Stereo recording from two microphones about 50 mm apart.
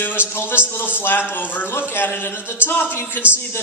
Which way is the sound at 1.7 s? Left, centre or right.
Left.